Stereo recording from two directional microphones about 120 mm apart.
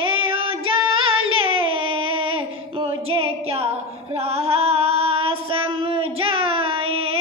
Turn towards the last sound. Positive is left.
turn(degrees=-50)  # may be behind; listen again after turning